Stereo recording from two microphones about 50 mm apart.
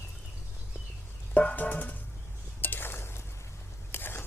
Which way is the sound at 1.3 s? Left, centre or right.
Left.